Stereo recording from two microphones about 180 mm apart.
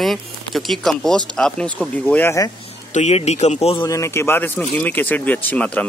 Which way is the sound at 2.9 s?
35° left (ahead or behind).